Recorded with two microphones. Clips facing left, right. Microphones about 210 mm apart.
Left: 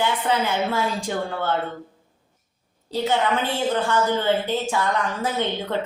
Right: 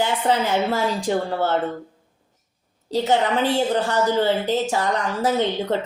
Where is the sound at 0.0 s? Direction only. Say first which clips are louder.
Right 2 dB; 40° right (ahead or behind).